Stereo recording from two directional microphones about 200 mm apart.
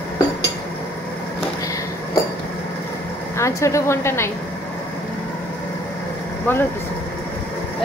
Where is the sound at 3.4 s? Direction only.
15° left (ahead or behind).